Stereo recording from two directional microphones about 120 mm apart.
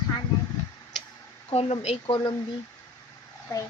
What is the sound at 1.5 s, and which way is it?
Speech, 60° left (ahead or behind).